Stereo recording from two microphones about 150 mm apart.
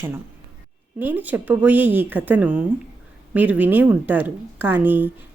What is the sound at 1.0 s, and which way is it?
Speech, 10° right (ahead or behind).